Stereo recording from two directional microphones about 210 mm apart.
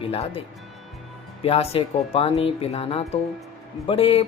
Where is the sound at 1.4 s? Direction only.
30° left (ahead or behind).